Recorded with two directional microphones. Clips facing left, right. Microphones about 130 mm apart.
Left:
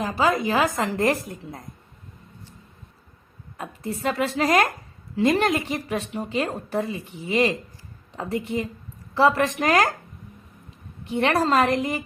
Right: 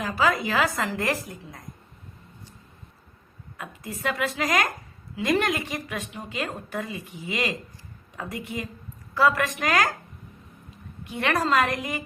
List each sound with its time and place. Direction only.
0.2 s a woman's voice: 20° left (ahead or behind)
3.6 s a woman's voice: 30° left (ahead or behind)
11.1 s a woman's voice: 25° left (ahead or behind)